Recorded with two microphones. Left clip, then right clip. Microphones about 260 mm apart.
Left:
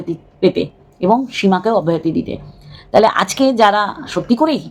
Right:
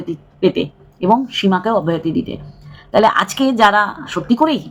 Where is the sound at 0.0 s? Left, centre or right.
Centre.